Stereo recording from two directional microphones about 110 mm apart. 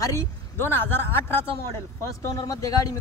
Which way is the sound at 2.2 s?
30° left (ahead or behind).